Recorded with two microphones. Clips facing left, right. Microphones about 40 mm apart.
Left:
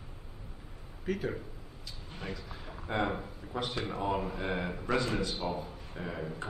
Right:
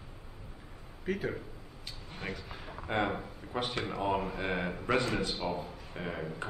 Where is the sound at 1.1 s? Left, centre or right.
Centre.